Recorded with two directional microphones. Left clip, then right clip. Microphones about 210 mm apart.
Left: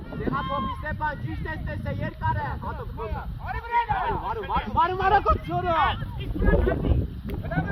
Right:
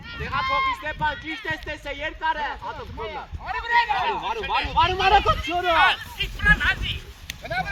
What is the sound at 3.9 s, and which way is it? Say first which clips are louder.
Speech: right 3 dB; 35° right (ahead or behind).